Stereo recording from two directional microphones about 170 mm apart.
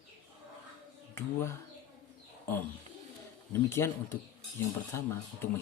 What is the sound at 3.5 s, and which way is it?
A man's voice, 15° left (ahead or behind).